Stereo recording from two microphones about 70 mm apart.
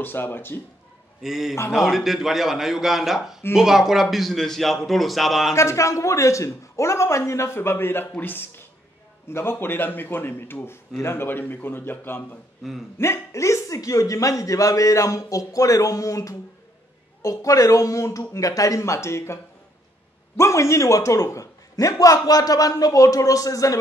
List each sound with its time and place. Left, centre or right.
0.0 s a man's voice: left
1.2 s a man's voice: centre
5.5 s a man's voice: left